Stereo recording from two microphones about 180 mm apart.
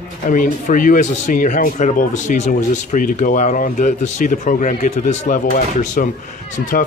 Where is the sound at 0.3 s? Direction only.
50° left (ahead or behind).